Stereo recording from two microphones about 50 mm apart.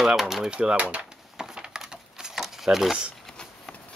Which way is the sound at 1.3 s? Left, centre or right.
Centre.